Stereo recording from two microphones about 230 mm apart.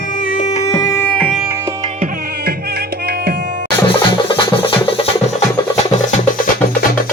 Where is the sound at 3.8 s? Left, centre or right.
Left.